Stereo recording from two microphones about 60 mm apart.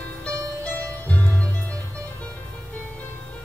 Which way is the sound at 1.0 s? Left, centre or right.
Left.